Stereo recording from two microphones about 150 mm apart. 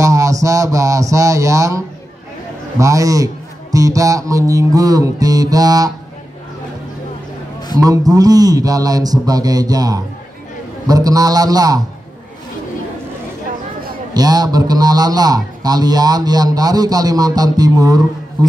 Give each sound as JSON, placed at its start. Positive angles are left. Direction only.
{"t": 0.0, "sound": "music", "side_deg": -20}
{"t": 2.8, "sound": "a man's voice", "side_deg": -20}
{"t": 7.8, "sound": "a man's voice", "side_deg": -25}
{"t": 14.1, "sound": "a man's voice", "side_deg": -25}